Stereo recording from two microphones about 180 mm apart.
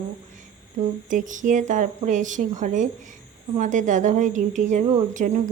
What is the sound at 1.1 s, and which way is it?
A woman's voice, 45° right (ahead or behind).